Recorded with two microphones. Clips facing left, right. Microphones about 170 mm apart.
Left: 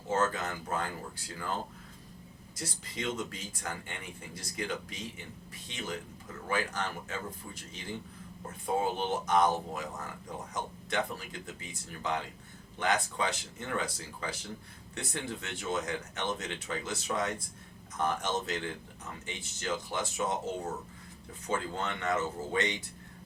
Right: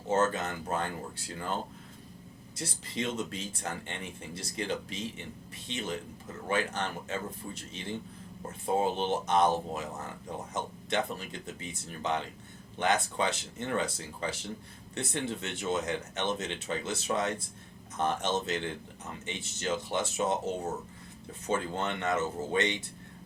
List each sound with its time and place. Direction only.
0.1 s speech: 20° right (ahead or behind)
2.6 s speech: 25° right (ahead or behind)